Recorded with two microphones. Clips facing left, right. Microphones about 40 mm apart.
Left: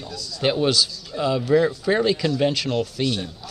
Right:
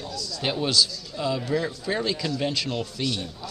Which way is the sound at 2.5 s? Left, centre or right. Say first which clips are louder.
Left 5 dB; centre.